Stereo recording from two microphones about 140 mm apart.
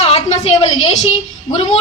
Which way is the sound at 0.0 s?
45° left (ahead or behind).